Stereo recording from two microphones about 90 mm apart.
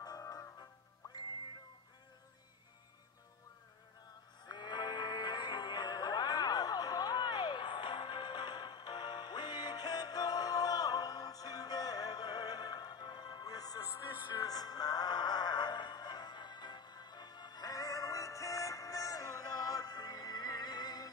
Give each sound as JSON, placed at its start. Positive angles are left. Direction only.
{"t": 0.0, "sound": "music", "side_deg": 45}
{"t": 4.5, "sound": "music", "side_deg": 55}
{"t": 14.1, "sound": "music", "side_deg": 60}